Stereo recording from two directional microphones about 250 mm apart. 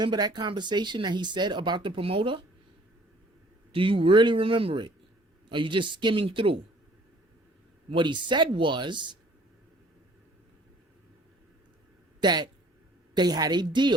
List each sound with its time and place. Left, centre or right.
0.0 s speech: centre
3.7 s speech: right
7.9 s speech: centre
12.2 s speech: centre